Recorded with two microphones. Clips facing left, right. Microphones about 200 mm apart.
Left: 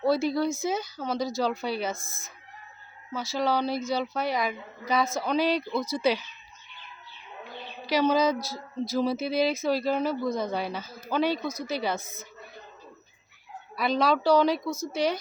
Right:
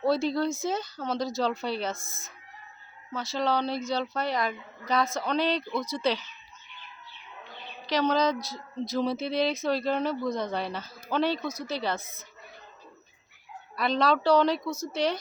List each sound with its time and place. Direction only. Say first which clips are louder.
0.0 s speech: left 1 dB; 5° left (ahead or behind)
2.0 s speech: left 1 dB; 20° right (ahead or behind)
3.1 s speech: left 1 dB; 5° left (ahead or behind)
7.9 s speech: left 2 dB; 5° left (ahead or behind)
13.7 s speech: left 1 dB; 5° left (ahead or behind)